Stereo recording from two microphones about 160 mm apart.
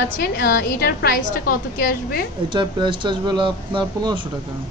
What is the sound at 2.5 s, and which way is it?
Speech, 30° right (ahead or behind).